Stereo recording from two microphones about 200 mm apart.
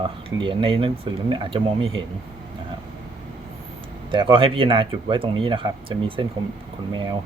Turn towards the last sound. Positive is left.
turn(degrees=-20)  # may be behind; listen again after turning